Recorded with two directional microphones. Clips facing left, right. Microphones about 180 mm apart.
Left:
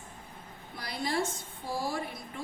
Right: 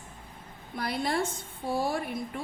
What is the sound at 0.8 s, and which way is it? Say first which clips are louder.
Speech: right 3 dB; 60° right (ahead or behind).